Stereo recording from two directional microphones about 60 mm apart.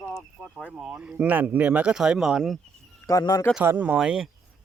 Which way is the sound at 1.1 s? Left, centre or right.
Right.